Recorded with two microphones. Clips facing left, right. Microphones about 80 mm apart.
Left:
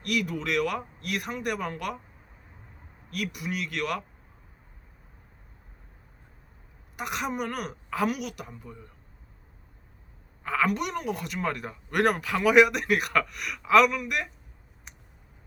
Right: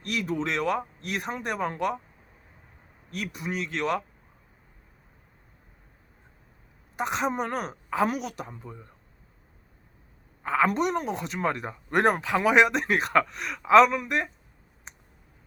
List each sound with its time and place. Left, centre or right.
0.0 s speech: right
3.1 s speech: right
6.9 s speech: right
10.4 s speech: right